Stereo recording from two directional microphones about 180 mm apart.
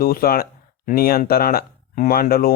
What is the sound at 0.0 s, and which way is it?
Speech, 55° left (ahead or behind).